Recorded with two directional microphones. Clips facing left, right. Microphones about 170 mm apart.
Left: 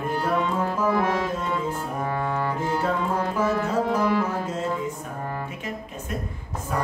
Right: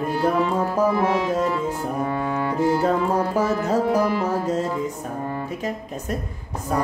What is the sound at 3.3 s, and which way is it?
Music, 40° right (ahead or behind).